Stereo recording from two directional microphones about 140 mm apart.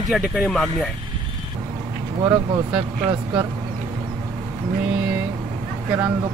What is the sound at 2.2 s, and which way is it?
Speech, 20° right (ahead or behind).